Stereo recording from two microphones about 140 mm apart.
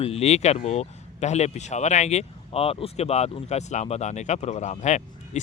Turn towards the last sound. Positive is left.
turn(degrees=55)  # may be behind; listen again after turning